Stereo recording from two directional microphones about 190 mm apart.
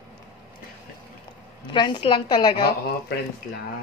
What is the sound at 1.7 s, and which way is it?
A woman's voice, 25° left (ahead or behind).